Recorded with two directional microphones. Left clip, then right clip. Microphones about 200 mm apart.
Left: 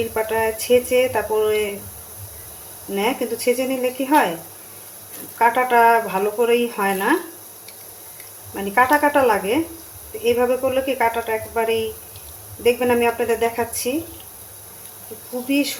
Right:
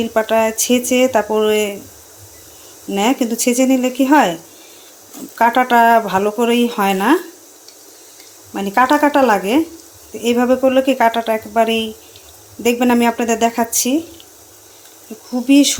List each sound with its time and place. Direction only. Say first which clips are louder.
0.1 s speech: right 6 dB; 55° right (ahead or behind)
2.9 s speech: right 5 dB; 55° right (ahead or behind)
5.4 s speech: right 3 dB; 50° right (ahead or behind)
8.5 s speech: right 3 dB; 50° right (ahead or behind)